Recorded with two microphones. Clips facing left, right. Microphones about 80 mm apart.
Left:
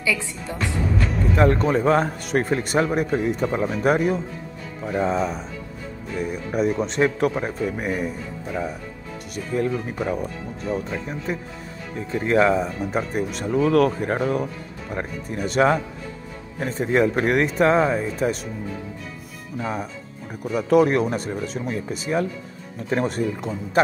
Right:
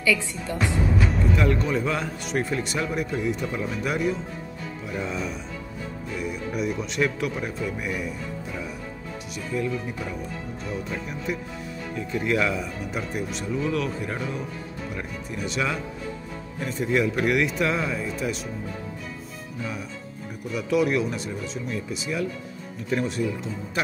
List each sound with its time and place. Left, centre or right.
0.0 s a woman's voice: centre
0.9 s music: centre
1.3 s speech: left
19.6 s speech: left